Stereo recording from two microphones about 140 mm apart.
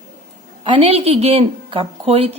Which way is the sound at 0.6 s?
40° right (ahead or behind).